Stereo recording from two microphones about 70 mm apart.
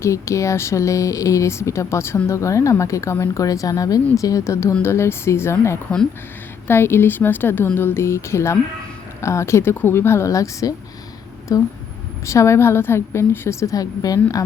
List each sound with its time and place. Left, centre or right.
0.0 s a woman's voice: left
3.4 s a woman's voice: left
12.2 s a woman's voice: left